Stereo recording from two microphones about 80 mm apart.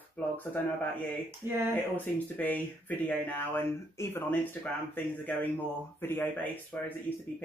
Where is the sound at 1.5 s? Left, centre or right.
Right.